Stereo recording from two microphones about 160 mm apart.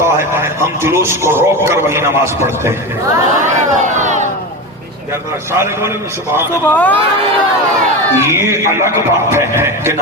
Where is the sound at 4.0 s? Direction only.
50° right (ahead or behind).